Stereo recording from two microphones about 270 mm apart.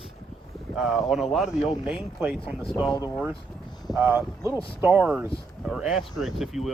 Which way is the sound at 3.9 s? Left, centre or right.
Centre.